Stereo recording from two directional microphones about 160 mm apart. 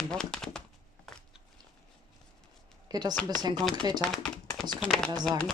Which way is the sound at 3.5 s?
5° left (ahead or behind).